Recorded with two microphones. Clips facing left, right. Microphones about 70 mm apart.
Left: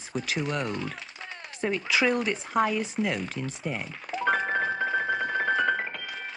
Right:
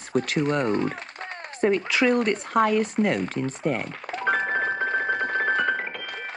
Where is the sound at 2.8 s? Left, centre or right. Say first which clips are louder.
Right 6 dB; right.